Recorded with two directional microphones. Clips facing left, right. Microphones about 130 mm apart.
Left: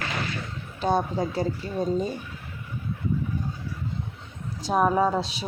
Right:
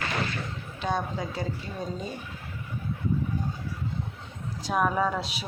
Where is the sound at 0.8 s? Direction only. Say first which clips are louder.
Left 5 dB; 35° left (ahead or behind).